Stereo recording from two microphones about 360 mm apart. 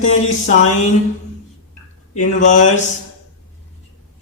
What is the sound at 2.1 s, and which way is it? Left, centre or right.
Speech, centre.